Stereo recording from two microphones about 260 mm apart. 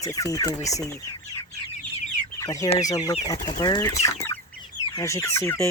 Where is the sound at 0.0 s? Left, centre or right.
Centre.